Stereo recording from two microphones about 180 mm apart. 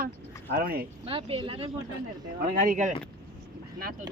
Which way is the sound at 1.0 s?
30° right (ahead or behind).